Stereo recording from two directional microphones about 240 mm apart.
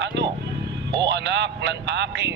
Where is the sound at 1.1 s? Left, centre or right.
Right.